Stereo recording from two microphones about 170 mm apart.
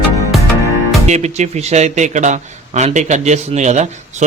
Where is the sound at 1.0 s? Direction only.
40° right (ahead or behind).